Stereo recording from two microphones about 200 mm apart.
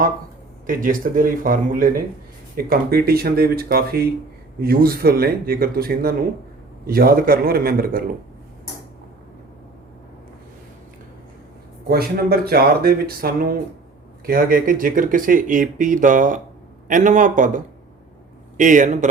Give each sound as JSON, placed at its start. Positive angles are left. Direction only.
{"t": 0.7, "sound": "speech", "side_deg": -45}
{"t": 11.9, "sound": "speech", "side_deg": -50}